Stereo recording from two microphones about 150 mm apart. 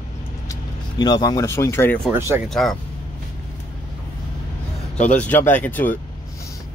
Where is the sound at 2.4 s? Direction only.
Centre (ahead or behind).